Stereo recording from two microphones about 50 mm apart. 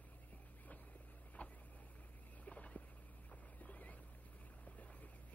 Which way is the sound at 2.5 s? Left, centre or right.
Left.